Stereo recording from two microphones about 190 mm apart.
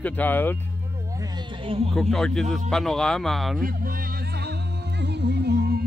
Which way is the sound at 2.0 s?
5° left (ahead or behind).